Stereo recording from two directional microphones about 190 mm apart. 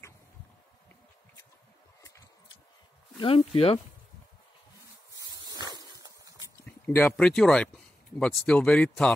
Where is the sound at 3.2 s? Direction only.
30° left (ahead or behind).